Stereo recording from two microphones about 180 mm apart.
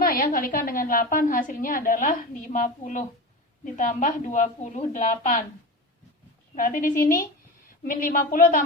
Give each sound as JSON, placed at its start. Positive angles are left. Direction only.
{"t": 0.0, "sound": "a woman's voice", "side_deg": 55}
{"t": 6.6, "sound": "a woman's voice", "side_deg": 50}